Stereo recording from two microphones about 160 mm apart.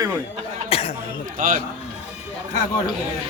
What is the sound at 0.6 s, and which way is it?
Cough, 35° left (ahead or behind).